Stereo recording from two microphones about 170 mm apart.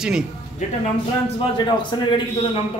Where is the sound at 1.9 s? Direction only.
25° left (ahead or behind).